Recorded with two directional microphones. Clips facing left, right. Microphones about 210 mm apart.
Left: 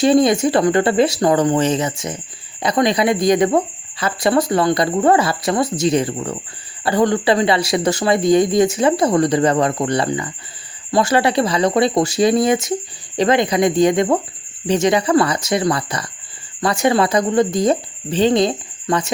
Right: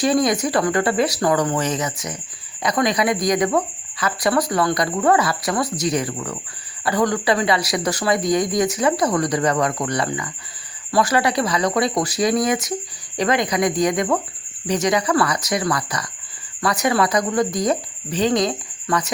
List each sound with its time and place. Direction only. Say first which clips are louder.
0.0 s speech: left 5 dB; 25° left (ahead or behind)